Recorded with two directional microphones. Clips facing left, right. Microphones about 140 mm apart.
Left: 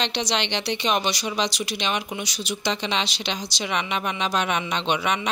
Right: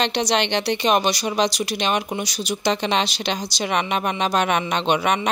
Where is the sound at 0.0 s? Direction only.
50° right (ahead or behind).